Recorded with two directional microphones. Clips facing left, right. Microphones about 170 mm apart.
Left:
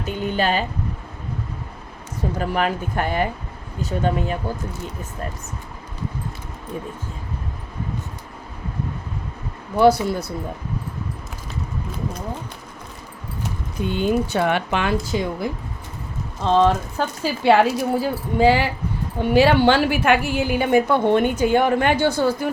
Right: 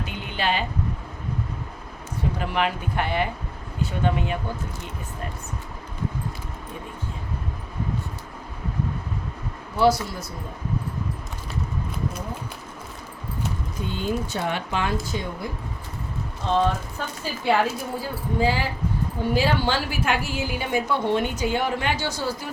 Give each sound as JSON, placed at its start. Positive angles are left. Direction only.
{"t": 0.0, "sound": "speech", "side_deg": 45}
{"t": 2.4, "sound": "speech", "side_deg": 40}
{"t": 9.7, "sound": "a woman's voice", "side_deg": 55}
{"t": 13.9, "sound": "speech", "side_deg": 70}
{"t": 15.1, "sound": "speech", "side_deg": 90}
{"t": 16.4, "sound": "a woman's voice", "side_deg": 90}